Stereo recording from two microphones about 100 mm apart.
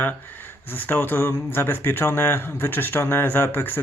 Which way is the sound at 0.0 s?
20° left (ahead or behind).